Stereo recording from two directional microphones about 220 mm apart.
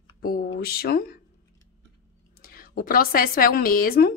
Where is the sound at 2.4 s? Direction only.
40° left (ahead or behind).